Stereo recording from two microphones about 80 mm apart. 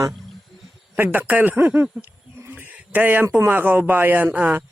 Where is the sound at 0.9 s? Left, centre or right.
Right.